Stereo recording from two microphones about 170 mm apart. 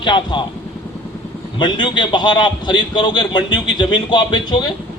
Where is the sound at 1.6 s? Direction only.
30° left (ahead or behind).